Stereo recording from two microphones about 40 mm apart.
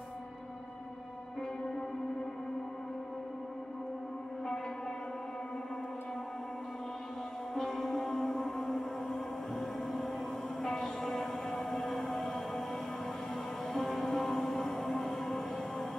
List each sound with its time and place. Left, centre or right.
7.5 s music: centre
10.6 s a sound: centre
13.7 s music: centre